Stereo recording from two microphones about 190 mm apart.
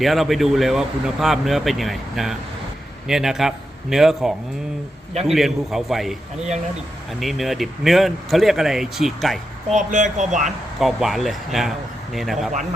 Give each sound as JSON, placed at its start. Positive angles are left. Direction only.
{"t": 0.0, "sound": "speech", "side_deg": 0}
{"t": 9.7, "sound": "speech", "side_deg": -40}
{"t": 10.8, "sound": "speech", "side_deg": 0}